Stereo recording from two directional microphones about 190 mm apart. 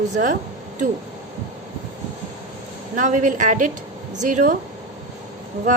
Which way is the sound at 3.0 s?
40° right (ahead or behind).